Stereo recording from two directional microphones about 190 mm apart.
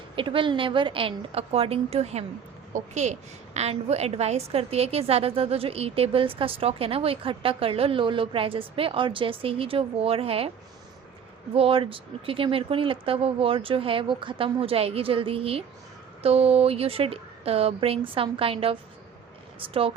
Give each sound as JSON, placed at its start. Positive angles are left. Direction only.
{"t": 0.2, "sound": "a woman's voice", "side_deg": -25}
{"t": 11.5, "sound": "a woman's voice", "side_deg": -30}